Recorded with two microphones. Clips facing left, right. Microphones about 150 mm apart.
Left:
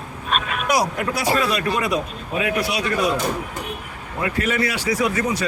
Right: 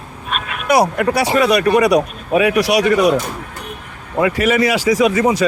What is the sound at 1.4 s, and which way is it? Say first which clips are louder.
Speech: right 9 dB; 80° right.